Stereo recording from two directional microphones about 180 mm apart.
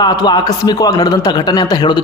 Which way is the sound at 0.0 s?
25° left (ahead or behind).